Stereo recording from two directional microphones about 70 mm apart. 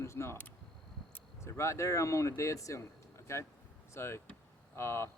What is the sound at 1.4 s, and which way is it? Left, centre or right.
Speech, left.